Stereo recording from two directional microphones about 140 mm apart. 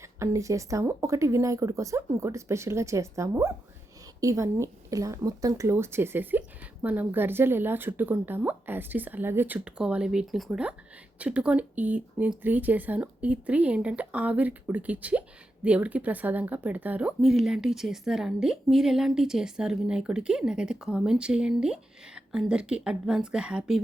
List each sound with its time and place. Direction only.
0.2 s speech: 20° right (ahead or behind); by 23.8 s 5° right (ahead or behind)